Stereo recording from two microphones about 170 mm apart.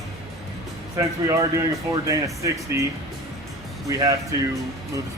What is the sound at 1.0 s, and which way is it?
Speech, 20° right (ahead or behind).